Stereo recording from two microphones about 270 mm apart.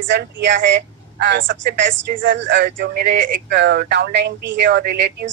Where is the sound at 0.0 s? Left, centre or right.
Right.